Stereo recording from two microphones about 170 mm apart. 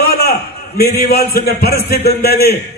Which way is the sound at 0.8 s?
65° left (ahead or behind).